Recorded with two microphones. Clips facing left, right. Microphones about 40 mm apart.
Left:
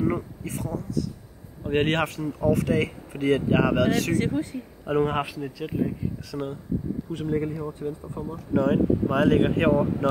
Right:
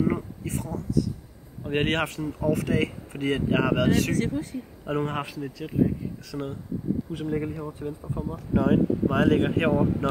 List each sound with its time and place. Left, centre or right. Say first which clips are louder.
0.0 s speech: even; centre
4.2 s speech: left 2 dB; left
4.8 s speech: left 5 dB; centre